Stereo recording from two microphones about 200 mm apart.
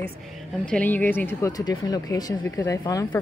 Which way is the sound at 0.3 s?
5° left (ahead or behind).